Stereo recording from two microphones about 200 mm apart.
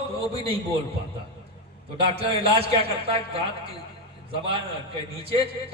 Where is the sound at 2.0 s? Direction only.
30° right (ahead or behind).